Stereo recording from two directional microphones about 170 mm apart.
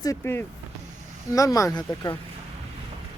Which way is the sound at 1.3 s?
20° left (ahead or behind).